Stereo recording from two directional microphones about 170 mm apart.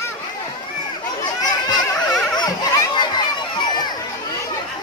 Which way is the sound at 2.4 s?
20° left (ahead or behind).